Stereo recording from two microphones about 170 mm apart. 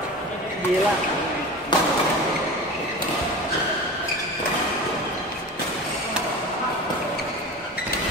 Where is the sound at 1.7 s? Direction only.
25° left (ahead or behind).